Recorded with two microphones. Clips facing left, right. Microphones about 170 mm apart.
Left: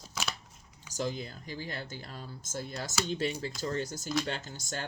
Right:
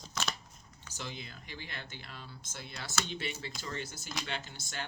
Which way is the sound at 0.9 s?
40° left (ahead or behind).